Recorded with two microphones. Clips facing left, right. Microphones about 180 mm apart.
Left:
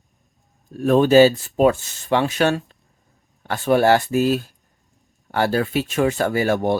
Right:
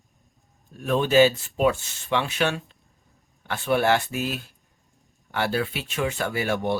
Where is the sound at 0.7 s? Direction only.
40° left (ahead or behind).